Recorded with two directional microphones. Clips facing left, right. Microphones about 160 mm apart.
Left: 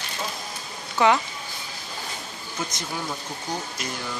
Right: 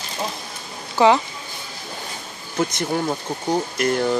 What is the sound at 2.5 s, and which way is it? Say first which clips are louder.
Speech: right 10 dB; 55° right (ahead or behind).